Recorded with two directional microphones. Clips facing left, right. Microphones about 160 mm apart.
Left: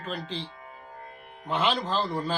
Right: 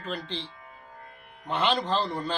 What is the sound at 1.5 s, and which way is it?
Speech, centre (ahead or behind).